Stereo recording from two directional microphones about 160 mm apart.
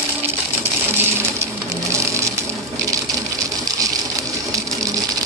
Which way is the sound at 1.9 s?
15° right (ahead or behind).